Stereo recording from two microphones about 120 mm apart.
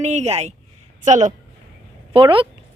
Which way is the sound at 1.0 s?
85° right.